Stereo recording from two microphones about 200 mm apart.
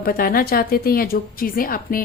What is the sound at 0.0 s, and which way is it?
A woman's voice, 45° left (ahead or behind).